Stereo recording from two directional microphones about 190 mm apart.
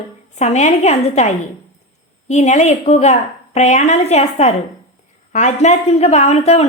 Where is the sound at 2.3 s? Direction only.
35° left (ahead or behind).